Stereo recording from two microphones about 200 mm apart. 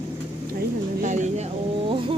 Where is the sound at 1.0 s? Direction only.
35° right (ahead or behind).